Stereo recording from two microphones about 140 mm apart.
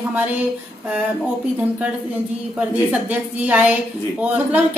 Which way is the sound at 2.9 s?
10° right (ahead or behind).